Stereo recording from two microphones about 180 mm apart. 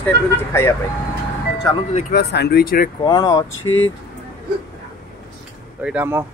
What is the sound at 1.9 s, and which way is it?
Speech, 40° left (ahead or behind).